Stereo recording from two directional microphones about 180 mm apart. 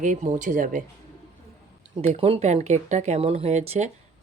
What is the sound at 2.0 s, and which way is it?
Speech, 35° right (ahead or behind).